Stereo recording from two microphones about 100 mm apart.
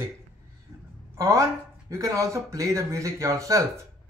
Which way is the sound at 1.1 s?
35° right (ahead or behind).